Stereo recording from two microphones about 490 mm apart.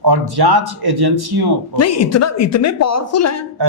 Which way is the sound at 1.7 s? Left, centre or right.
Left.